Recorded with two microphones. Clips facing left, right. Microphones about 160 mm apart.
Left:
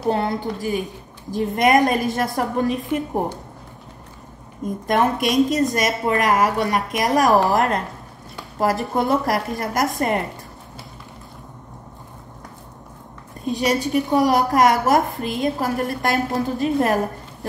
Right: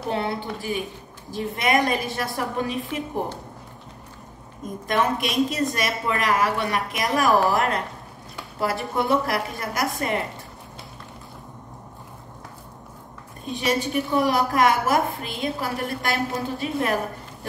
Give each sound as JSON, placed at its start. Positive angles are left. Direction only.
{"t": 0.1, "sound": "a woman's voice", "side_deg": 40}
{"t": 4.8, "sound": "a woman's voice", "side_deg": 45}
{"t": 13.5, "sound": "a woman's voice", "side_deg": 40}